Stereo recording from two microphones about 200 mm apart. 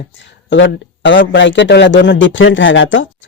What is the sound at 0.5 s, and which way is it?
A man's voice, 65° left (ahead or behind).